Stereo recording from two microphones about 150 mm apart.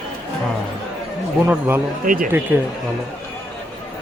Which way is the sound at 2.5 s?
15° right (ahead or behind).